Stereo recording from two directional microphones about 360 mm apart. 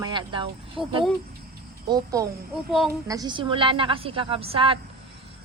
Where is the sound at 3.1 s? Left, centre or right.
Centre.